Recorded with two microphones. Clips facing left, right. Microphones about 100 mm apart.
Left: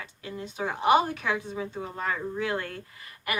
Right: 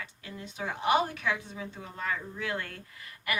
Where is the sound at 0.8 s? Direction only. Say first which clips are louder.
Left 4 dB; 10° left (ahead or behind).